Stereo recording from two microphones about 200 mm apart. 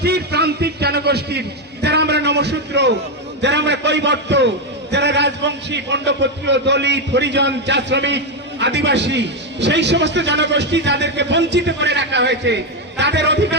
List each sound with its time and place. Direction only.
0.0 s a man's voice: 55° right (ahead or behind)